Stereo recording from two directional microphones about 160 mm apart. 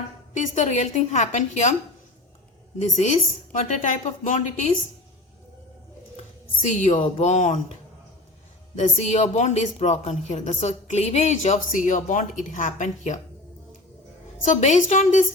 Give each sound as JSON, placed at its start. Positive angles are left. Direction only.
{"t": 0.3, "sound": "a woman's voice", "side_deg": 50}
{"t": 2.7, "sound": "a woman's voice", "side_deg": 45}
{"t": 6.7, "sound": "a woman's voice", "side_deg": 50}
{"t": 8.7, "sound": "a woman's voice", "side_deg": 45}
{"t": 14.4, "sound": "a woman's voice", "side_deg": 50}